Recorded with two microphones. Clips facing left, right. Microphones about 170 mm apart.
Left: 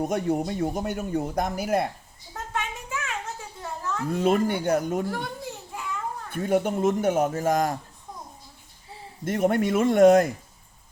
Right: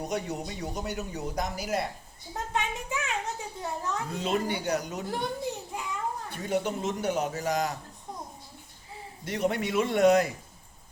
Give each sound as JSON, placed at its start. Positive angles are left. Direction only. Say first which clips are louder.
{"t": 0.0, "sound": "speech", "louder": "left 7 dB", "side_deg": 50}
{"t": 2.3, "sound": "a sound", "louder": "right 1 dB", "side_deg": -20}
{"t": 4.1, "sound": "speech", "louder": "left 8 dB", "side_deg": 50}
{"t": 5.4, "sound": "a sound", "louder": "right 2 dB", "side_deg": -20}
{"t": 6.3, "sound": "speech", "louder": "left 7 dB", "side_deg": 50}
{"t": 9.2, "sound": "speech", "louder": "left 6 dB", "side_deg": 50}